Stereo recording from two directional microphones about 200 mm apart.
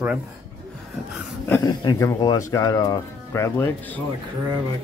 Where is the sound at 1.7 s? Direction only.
20° left (ahead or behind).